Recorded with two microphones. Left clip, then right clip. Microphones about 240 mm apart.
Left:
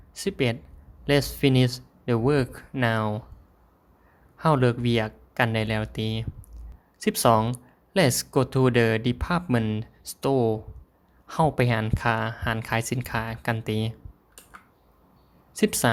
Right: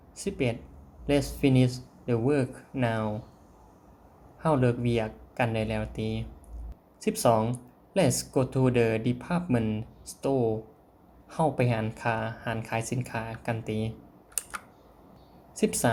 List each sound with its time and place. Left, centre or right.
0.1 s speech: left
4.4 s speech: left
15.5 s speech: left